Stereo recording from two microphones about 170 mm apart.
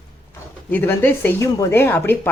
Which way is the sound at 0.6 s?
10° left (ahead or behind).